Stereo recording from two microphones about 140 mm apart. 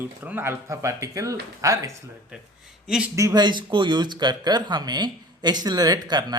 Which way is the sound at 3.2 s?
25° right (ahead or behind).